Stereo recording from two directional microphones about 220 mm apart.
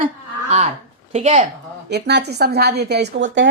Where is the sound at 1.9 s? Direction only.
50° right (ahead or behind).